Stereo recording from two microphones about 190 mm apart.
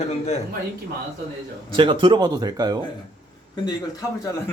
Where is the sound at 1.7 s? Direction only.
25° right (ahead or behind).